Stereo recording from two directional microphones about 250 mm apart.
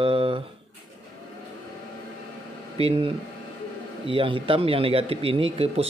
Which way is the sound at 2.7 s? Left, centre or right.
Right.